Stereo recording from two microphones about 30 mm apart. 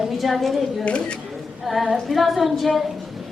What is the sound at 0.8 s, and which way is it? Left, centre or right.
Speech, left.